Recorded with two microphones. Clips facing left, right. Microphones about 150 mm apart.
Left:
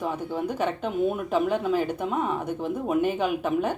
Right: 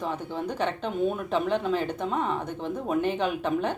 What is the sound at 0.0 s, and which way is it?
Speech, 10° left (ahead or behind).